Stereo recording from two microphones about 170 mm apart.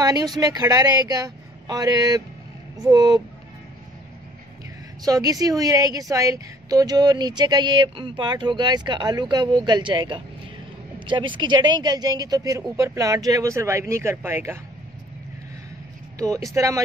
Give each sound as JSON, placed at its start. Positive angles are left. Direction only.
{"t": 0.0, "sound": "a woman's voice", "side_deg": -25}
{"t": 5.0, "sound": "a woman's voice", "side_deg": -20}
{"t": 16.2, "sound": "a woman's voice", "side_deg": -20}